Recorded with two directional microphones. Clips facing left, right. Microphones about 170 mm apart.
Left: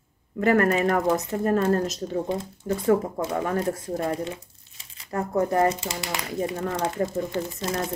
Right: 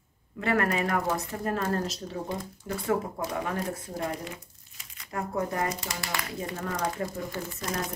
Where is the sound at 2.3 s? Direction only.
25° left (ahead or behind).